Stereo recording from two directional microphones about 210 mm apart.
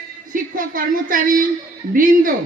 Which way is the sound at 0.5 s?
40° right (ahead or behind).